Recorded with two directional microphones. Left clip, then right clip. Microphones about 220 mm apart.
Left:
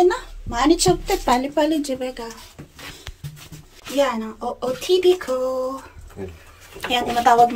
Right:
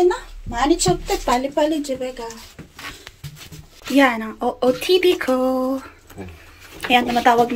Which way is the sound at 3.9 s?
5° left (ahead or behind).